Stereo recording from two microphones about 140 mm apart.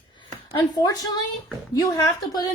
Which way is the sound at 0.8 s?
30° left (ahead or behind).